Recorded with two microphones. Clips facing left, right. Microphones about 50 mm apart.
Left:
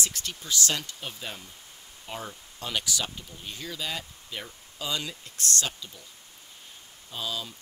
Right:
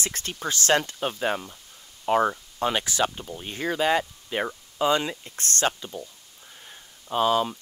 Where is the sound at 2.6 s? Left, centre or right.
Right.